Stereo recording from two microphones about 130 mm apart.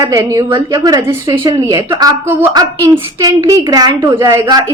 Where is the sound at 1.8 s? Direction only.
35° right (ahead or behind).